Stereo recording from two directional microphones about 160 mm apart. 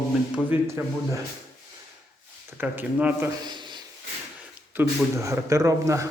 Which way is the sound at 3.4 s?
30° right (ahead or behind).